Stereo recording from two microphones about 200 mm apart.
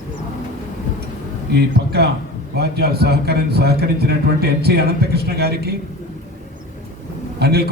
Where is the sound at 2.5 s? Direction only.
55° right (ahead or behind).